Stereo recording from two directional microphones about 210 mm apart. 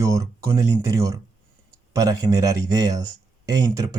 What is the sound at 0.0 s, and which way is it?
Speech, 15° right (ahead or behind).